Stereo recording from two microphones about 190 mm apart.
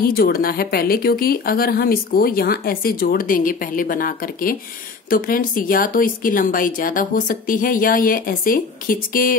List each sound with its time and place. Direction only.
0.0 s speech: 50° left (ahead or behind)